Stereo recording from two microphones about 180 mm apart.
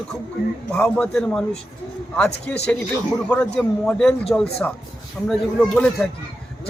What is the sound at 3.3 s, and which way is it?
A man's voice, 5° left (ahead or behind).